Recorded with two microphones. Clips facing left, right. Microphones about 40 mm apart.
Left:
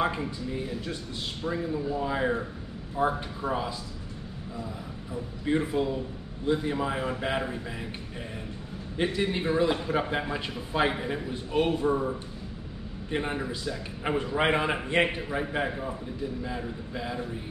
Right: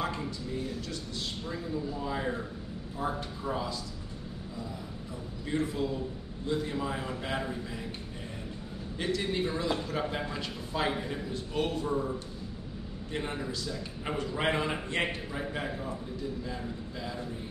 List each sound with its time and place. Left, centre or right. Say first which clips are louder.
0.0 s a man's voice: left 5 dB; left
5.4 s a man's voice: left 5 dB; left
8.9 s a man's voice: left 4 dB; left